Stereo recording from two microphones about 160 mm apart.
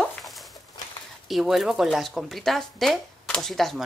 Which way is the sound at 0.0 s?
Centre (ahead or behind).